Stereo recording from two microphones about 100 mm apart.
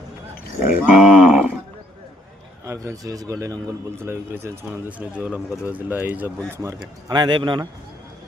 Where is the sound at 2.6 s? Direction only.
30° right (ahead or behind); by 6.3 s 15° right (ahead or behind).